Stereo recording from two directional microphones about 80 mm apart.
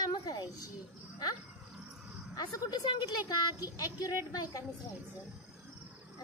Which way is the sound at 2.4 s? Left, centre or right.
Left.